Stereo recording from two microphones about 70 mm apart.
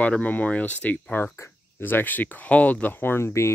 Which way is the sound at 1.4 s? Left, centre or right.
Left.